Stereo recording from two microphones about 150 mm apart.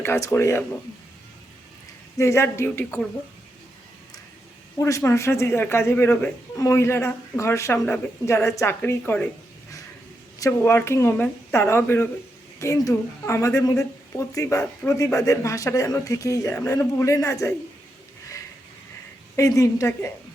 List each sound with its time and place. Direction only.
0.0 s a woman's voice: 15° left (ahead or behind)
2.1 s a woman's voice: 20° left (ahead or behind)
4.8 s a woman's voice: 20° left (ahead or behind)
10.4 s a woman's voice: 15° left (ahead or behind)
19.4 s a woman's voice: 20° left (ahead or behind)